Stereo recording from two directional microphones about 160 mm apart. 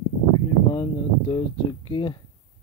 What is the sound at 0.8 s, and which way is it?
Speech, 30° left (ahead or behind).